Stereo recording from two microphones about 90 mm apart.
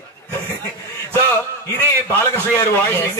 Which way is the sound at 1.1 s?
25° left (ahead or behind).